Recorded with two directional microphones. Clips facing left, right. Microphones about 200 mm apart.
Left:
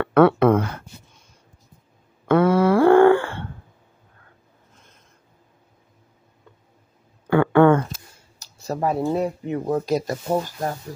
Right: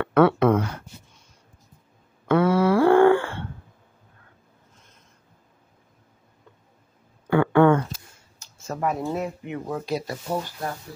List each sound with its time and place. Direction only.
0.0 s speech: 55° left (ahead or behind)
2.2 s wail: 50° left (ahead or behind)
7.2 s a sound: 50° left (ahead or behind)
8.4 s speech: 35° left (ahead or behind)